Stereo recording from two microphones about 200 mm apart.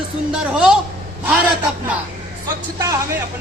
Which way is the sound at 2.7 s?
15° right (ahead or behind).